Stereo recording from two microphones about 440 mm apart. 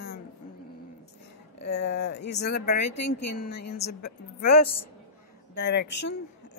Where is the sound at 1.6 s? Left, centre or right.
Left.